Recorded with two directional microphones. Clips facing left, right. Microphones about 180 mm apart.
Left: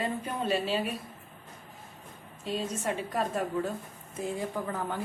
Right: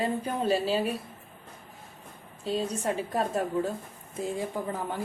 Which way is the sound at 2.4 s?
35° right (ahead or behind).